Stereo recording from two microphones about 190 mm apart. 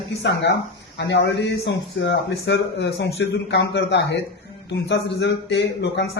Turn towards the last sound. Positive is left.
turn(degrees=65)  # may be behind; listen again after turning